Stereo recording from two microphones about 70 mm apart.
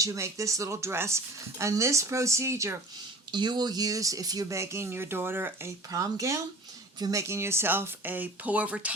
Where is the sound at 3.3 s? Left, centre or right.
Right.